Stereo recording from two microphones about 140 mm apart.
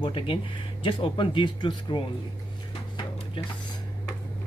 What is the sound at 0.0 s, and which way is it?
Speech, 35° left (ahead or behind).